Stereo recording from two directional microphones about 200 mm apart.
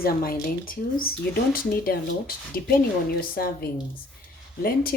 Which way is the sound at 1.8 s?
50° left (ahead or behind).